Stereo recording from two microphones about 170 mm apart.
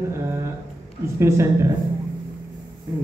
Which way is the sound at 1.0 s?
15° right (ahead or behind).